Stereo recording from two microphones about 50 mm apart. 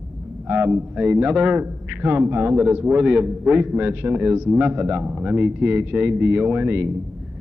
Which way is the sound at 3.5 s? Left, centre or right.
Right.